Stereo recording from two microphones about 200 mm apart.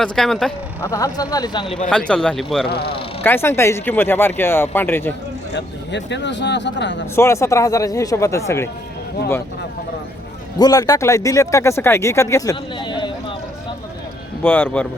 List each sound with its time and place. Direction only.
0.0 s speech: centre (ahead or behind)
0.8 s speech: 15° left (ahead or behind)
1.9 s speech: 5° left (ahead or behind)
2.6 s a man's voice: 50° left (ahead or behind)
3.2 s speech: 10° left (ahead or behind)
5.5 s speech: 60° left (ahead or behind)
7.2 s speech: 15° left (ahead or behind)
10.6 s speech: 20° left (ahead or behind)
14.4 s speech: 10° left (ahead or behind)